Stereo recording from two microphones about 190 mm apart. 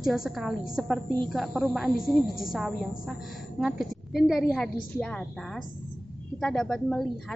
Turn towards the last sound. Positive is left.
turn(degrees=5)  # may be behind; listen again after turning